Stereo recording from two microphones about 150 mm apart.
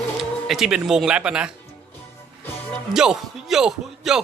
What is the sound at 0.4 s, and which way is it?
Speech, centre (ahead or behind).